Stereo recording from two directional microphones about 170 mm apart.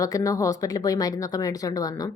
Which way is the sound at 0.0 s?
20° left (ahead or behind).